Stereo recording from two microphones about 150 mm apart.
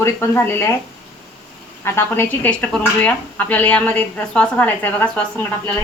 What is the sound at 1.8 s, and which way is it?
Speech, 15° left (ahead or behind).